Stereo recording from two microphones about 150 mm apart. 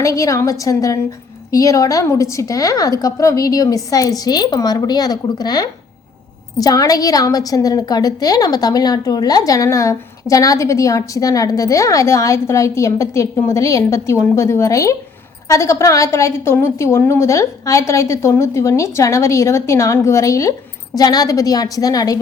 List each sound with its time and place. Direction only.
0.0 s a woman's voice: 20° left (ahead or behind)